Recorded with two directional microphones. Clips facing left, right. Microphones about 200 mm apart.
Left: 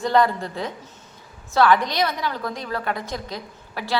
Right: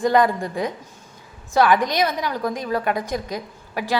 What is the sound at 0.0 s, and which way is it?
A woman's voice, 15° right (ahead or behind).